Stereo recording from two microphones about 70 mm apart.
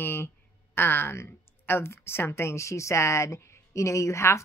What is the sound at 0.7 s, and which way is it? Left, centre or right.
A woman's voice, left.